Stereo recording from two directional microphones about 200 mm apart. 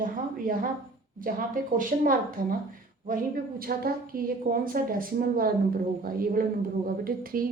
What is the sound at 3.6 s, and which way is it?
A woman's voice, 45° right (ahead or behind).